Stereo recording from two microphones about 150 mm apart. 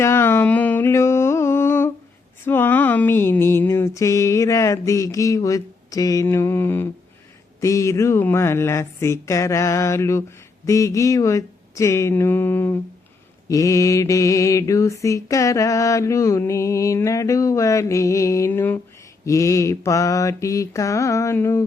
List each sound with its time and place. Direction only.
0.0 s music: 15° left (ahead or behind)
2.4 s a sound: 15° left (ahead or behind)
7.6 s mantra: 20° left (ahead or behind)